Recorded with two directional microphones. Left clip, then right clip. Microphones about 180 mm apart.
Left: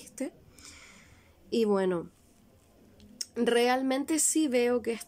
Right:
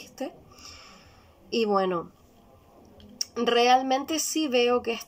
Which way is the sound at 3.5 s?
40° left (ahead or behind).